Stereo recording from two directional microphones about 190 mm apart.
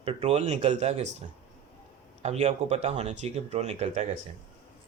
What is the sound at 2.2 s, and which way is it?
Speech, 35° right (ahead or behind).